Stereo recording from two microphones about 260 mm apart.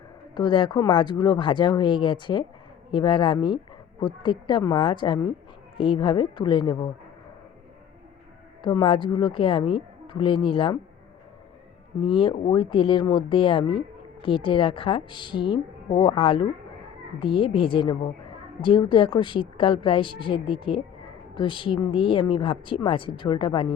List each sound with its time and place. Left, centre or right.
0.3 s speech: centre
8.6 s speech: centre
11.9 s speech: centre